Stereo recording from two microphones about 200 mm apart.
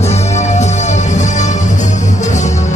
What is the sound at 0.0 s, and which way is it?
Music, 35° left (ahead or behind).